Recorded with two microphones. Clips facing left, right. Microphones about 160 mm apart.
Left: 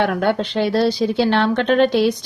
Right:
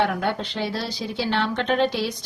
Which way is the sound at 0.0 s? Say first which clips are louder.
Left 5 dB; 65° left (ahead or behind).